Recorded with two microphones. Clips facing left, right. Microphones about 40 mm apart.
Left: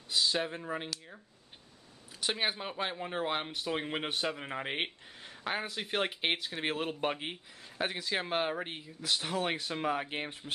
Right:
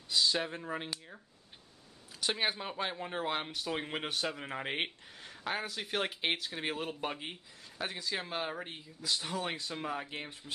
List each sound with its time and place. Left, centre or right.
0.1 s speech: centre
2.1 s speech: centre; by 10.0 s left
10.0 s speech: left